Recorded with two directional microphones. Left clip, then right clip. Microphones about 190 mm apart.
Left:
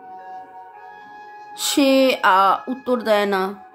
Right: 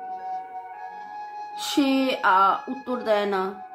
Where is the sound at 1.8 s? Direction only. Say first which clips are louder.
Left 7 dB; 40° left (ahead or behind).